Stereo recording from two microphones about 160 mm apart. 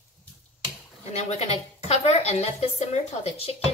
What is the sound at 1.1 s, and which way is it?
A woman's voice, 45° left (ahead or behind).